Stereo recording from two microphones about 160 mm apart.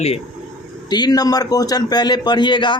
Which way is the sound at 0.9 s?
25° left (ahead or behind).